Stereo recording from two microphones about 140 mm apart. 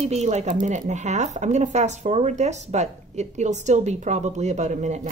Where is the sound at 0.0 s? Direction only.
55° right (ahead or behind).